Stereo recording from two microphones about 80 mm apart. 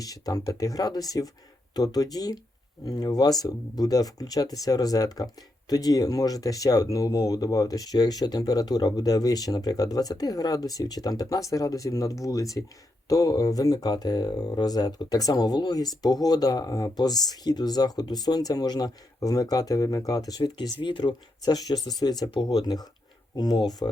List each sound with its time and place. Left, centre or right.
0.0 s speech: left
20.8 s speech: left